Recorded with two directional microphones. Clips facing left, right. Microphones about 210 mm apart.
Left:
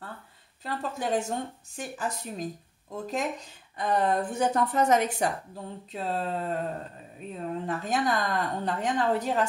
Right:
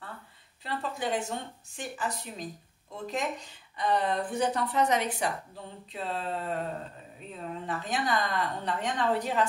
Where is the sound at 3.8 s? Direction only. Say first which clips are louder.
Left 2 dB; 50° left (ahead or behind).